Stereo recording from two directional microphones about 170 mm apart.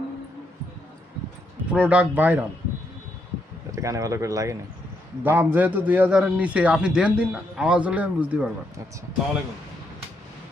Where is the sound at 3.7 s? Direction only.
20° right (ahead or behind).